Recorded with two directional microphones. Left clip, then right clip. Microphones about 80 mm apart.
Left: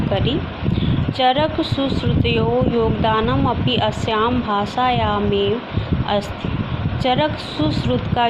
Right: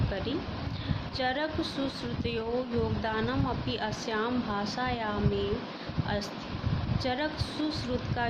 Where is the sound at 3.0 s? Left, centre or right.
Left.